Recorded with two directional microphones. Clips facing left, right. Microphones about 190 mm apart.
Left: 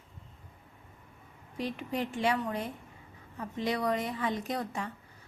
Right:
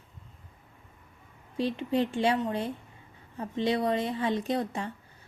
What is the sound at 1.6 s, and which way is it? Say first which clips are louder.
A woman's voice: right 6 dB; 30° right (ahead or behind).